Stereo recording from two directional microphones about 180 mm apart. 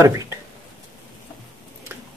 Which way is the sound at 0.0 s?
15° right (ahead or behind).